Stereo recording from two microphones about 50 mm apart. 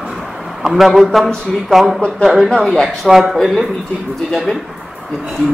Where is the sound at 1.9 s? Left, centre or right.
Left.